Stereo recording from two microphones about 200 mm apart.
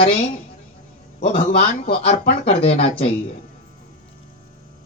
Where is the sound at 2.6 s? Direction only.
30° left (ahead or behind).